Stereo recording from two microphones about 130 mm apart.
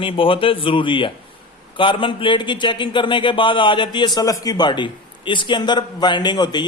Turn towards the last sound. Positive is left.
turn(degrees=35)  # may be behind; listen again after turning